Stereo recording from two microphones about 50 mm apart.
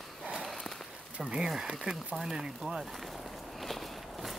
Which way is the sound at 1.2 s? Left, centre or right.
Centre.